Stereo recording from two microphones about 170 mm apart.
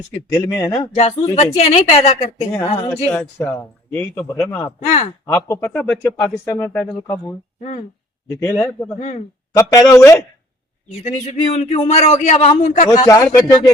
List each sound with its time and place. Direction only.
0.3 s speech: 20° left (ahead or behind)
0.8 s speech: 40° left (ahead or behind)
2.6 s speech: 20° left (ahead or behind)
4.8 s speech: 40° left (ahead or behind)
5.2 s speech: 15° left (ahead or behind)
8.4 s speech: 15° left (ahead or behind)
9.0 s speech: 40° left (ahead or behind)
9.6 s speech: 15° left (ahead or behind)
11.0 s speech: 45° left (ahead or behind)
13.1 s speech: 20° left (ahead or behind)